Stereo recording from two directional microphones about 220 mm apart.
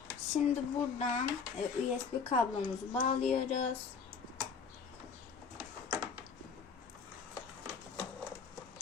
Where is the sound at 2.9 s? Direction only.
30° left (ahead or behind).